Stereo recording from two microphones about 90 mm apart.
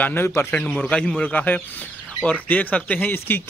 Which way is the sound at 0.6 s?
15° left (ahead or behind).